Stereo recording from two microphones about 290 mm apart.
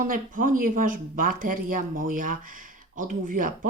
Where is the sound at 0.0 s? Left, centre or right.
Right.